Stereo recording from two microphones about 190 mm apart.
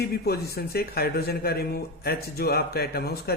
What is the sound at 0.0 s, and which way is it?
A man's voice, 55° left (ahead or behind).